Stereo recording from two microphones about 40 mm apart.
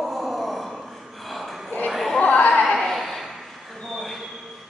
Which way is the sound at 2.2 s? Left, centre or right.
Left.